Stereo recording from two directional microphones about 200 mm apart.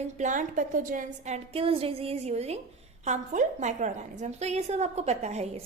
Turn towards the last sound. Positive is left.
turn(degrees=-35)  # may be behind; listen again after turning